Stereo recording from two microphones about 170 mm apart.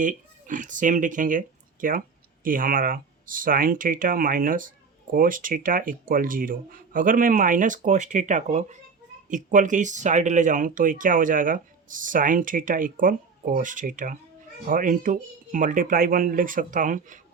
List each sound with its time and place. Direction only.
0.0 s speech: 50° right (ahead or behind)